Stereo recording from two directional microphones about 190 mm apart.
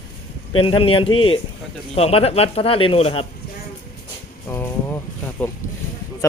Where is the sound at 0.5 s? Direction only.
30° left (ahead or behind).